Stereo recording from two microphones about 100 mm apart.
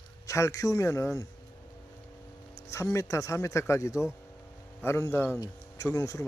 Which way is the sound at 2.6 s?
30° left (ahead or behind).